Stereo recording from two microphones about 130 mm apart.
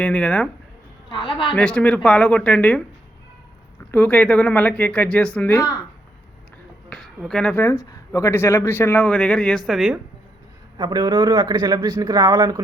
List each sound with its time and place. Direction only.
0.0 s speech: 10° left (ahead or behind)
1.1 s a woman's voice: 40° left (ahead or behind)
1.5 s speech: 10° left (ahead or behind)
3.9 s speech: 10° left (ahead or behind)
5.5 s speech: 30° left (ahead or behind)
6.9 s speech: 5° left (ahead or behind)
7.6 s speech: 20° left (ahead or behind); by 10.0 s 5° right (ahead or behind)
10.8 s a man's voice: 30° right (ahead or behind)